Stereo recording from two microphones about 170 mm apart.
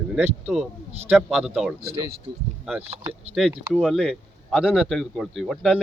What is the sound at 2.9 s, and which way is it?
Speech, 35° right (ahead or behind).